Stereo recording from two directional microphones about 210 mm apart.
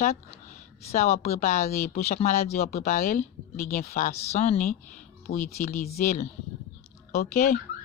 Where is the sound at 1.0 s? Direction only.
30° left (ahead or behind).